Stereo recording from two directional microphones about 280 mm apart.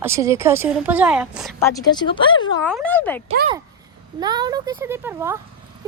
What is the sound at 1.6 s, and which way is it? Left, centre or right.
Speech, centre.